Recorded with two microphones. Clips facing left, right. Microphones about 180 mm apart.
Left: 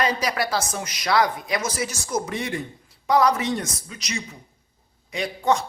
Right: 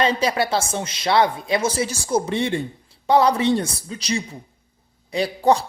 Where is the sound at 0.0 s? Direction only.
25° right (ahead or behind).